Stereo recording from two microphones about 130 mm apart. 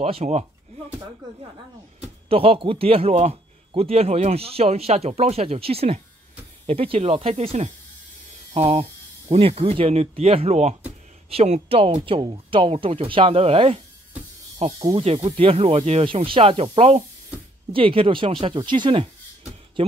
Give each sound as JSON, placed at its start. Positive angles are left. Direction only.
{"t": 0.0, "sound": "speech", "side_deg": -55}
{"t": 2.0, "sound": "a man's voice", "side_deg": -45}